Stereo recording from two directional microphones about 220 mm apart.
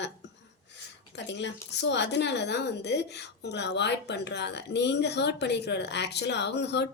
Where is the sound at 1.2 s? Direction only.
55° left (ahead or behind).